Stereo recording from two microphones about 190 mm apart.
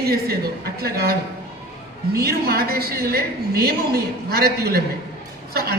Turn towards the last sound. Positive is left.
turn(degrees=-55)  # may be behind; listen again after turning